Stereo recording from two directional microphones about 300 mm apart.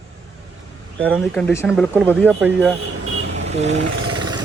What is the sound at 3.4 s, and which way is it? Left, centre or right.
Speech, right.